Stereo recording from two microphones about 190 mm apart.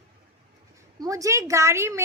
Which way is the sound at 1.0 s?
15° right (ahead or behind).